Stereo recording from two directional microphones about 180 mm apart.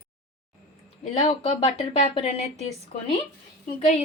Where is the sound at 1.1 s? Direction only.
30° left (ahead or behind).